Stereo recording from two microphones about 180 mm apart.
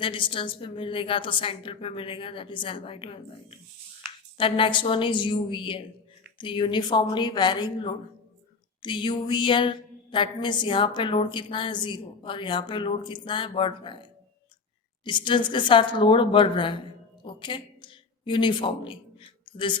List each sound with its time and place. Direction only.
0.0 s a woman's voice: 30° left (ahead or behind)